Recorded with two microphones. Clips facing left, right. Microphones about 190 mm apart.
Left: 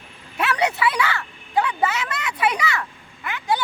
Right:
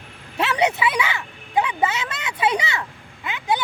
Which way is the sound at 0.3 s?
25° right (ahead or behind).